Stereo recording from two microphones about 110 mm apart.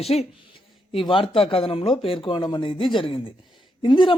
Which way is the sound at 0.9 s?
50° left (ahead or behind).